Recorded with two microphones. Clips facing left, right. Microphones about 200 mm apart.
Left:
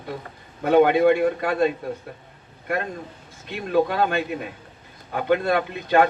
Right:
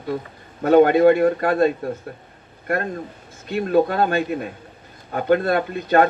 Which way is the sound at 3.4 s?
45° right (ahead or behind).